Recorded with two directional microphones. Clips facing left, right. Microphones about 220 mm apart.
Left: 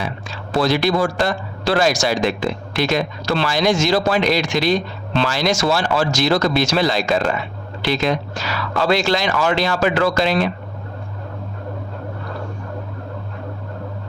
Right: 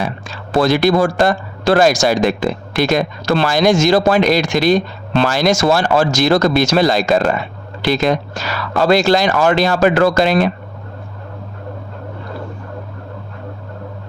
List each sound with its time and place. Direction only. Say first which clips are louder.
0.0 s speech: right 4 dB; 50° right (ahead or behind)